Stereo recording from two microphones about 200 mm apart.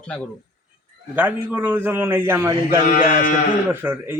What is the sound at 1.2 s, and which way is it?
A man's voice, 10° right (ahead or behind).